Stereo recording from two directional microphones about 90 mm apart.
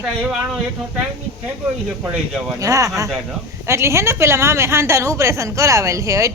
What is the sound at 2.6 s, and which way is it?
A woman's voice, 40° right (ahead or behind).